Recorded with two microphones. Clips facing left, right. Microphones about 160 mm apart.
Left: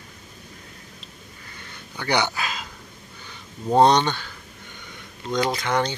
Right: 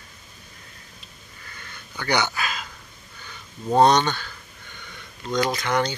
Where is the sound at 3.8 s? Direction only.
25° left (ahead or behind).